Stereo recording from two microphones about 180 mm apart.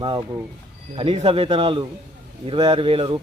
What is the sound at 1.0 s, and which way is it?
A man's voice, 35° right (ahead or behind).